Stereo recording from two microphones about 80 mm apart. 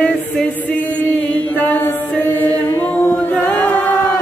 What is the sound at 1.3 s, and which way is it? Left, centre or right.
A capella, left.